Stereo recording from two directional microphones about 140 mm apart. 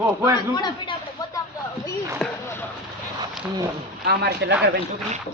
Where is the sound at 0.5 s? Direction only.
30° left (ahead or behind).